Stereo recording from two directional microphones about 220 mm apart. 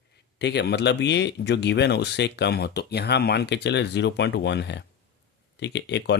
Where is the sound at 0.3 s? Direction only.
50° left (ahead or behind).